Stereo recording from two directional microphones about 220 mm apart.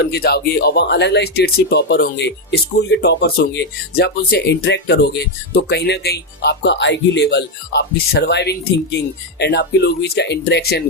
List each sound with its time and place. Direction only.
0.0 s speech: 50° left (ahead or behind)